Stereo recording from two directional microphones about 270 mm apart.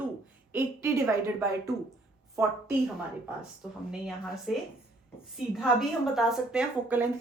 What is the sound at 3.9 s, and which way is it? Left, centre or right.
Speech, centre.